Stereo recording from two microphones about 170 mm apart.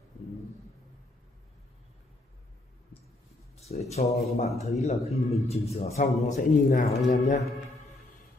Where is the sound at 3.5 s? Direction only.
40° left (ahead or behind).